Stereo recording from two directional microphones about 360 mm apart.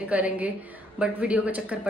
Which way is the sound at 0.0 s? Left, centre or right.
Centre.